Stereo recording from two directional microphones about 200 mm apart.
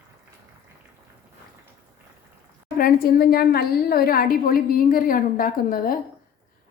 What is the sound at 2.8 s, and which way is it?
A woman's voice, 45° left (ahead or behind).